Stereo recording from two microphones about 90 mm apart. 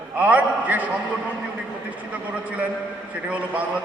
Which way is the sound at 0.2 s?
15° right (ahead or behind).